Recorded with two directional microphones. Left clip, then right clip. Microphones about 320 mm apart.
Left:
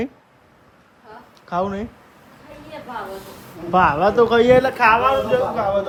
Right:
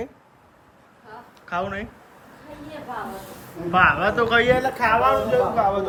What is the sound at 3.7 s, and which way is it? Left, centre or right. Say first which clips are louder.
Speech: left 2 dB; centre.